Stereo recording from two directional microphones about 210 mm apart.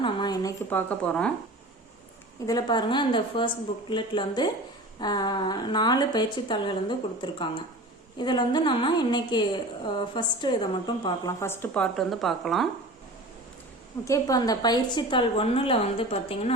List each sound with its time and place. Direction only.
0.0 s a sound: 20° left (ahead or behind)
0.7 s speech: 10° left (ahead or behind)
2.5 s a woman's voice: 20° left (ahead or behind); by 12.6 s centre (ahead or behind)
14.0 s a woman's voice: 15° left (ahead or behind)